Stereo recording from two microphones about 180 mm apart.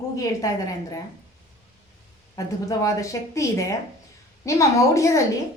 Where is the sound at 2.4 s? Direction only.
20° left (ahead or behind).